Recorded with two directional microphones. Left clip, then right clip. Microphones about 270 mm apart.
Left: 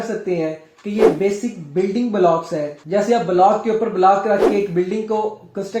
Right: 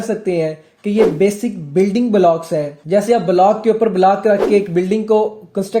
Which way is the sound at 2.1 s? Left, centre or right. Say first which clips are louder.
Right 2 dB; right.